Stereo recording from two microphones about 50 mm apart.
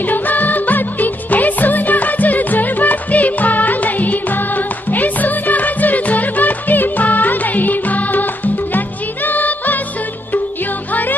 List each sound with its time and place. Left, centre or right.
0.0 s music: left
10.9 s music: left